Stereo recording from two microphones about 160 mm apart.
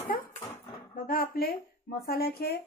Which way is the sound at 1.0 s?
70° left (ahead or behind).